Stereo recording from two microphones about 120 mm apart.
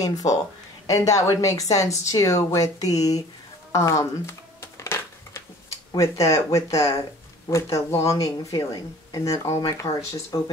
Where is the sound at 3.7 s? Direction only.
25° left (ahead or behind).